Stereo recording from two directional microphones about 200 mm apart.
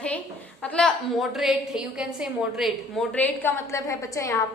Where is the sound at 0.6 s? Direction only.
5° left (ahead or behind).